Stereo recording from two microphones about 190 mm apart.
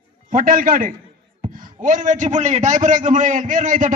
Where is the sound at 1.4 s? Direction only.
45° right (ahead or behind).